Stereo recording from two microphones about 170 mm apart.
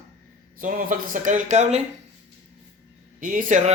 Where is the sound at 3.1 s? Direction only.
50° right (ahead or behind).